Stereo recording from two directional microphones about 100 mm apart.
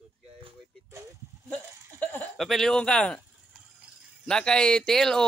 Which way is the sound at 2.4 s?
Centre (ahead or behind).